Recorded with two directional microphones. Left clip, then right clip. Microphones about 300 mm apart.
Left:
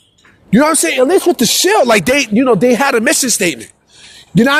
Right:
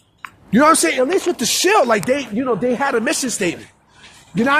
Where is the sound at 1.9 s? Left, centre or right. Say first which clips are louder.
Left 6 dB; left.